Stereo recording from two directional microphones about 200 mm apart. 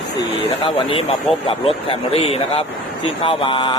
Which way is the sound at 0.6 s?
30° left (ahead or behind).